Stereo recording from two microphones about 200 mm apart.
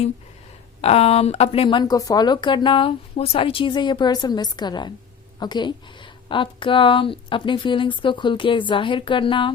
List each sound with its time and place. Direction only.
0.8 s speech: 30° left (ahead or behind)